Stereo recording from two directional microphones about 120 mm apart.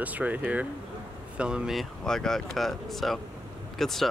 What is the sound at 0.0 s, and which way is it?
Speech, 10° right (ahead or behind).